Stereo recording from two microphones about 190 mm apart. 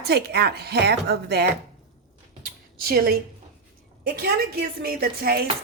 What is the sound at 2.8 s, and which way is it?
A woman's voice, 50° right (ahead or behind).